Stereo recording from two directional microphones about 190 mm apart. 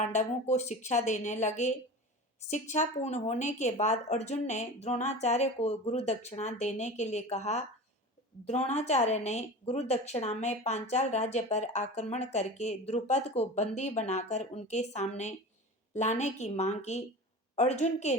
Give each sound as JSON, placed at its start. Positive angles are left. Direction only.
{"t": 0.0, "sound": "speech", "side_deg": 40}